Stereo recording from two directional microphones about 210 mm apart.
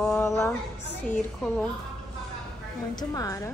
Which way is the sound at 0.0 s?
10° left (ahead or behind).